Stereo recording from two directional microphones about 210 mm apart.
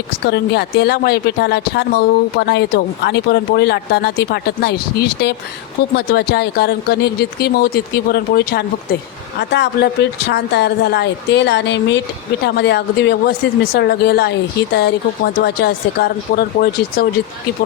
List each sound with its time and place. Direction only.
0.3 s speech: 50° left (ahead or behind)